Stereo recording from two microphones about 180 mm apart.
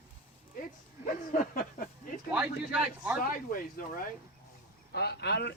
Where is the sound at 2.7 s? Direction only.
5° right (ahead or behind).